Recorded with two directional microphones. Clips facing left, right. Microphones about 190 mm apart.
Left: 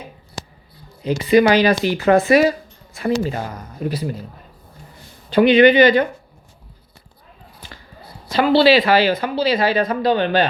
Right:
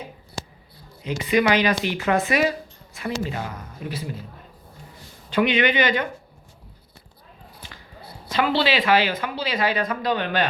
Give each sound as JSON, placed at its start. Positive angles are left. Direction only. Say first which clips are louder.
{"t": 1.0, "sound": "speech", "louder": "left 7 dB", "side_deg": 35}
{"t": 5.3, "sound": "speech", "louder": "left 9 dB", "side_deg": 35}
{"t": 8.3, "sound": "speech", "louder": "left 8 dB", "side_deg": 35}